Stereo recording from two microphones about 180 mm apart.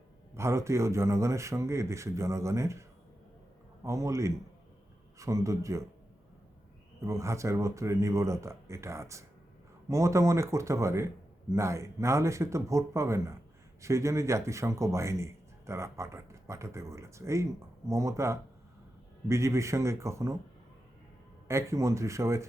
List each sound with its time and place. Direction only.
0.3 s a man's voice: 15° right (ahead or behind)
3.8 s a man's voice: 15° right (ahead or behind)
7.0 s a man's voice: 15° right (ahead or behind)
21.4 s a man's voice: 15° right (ahead or behind)